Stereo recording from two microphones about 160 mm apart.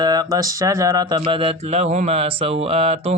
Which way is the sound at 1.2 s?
35° right (ahead or behind).